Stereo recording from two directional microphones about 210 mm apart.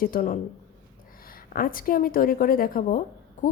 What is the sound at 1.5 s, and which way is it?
A woman's voice, 45° left (ahead or behind).